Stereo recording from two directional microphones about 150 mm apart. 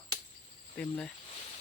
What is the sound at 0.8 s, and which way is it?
Speech, 10° left (ahead or behind).